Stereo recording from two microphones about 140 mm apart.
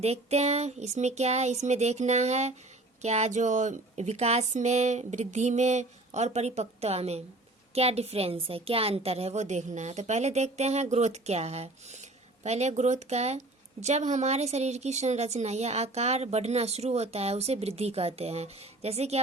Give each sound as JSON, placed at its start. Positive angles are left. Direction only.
{"t": 0.0, "sound": "speech", "side_deg": -50}